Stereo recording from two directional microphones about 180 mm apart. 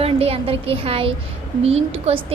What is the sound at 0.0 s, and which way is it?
A woman's voice, 35° right (ahead or behind).